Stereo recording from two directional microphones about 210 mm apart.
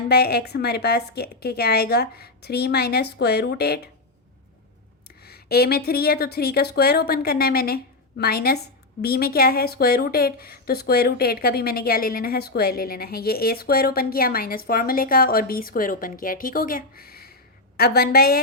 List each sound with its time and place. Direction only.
0.1 s speech: 50° left (ahead or behind)
5.0 s speech: 50° left (ahead or behind)